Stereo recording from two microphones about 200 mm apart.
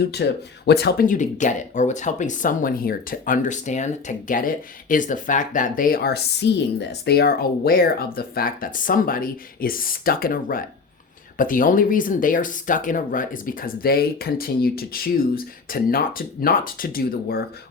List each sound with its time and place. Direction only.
0.0 s speech: 55° left (ahead or behind)